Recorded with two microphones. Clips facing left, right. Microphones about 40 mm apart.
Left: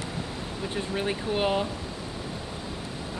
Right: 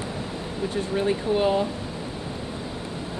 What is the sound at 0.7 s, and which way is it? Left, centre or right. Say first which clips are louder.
Speech: right 5 dB; centre.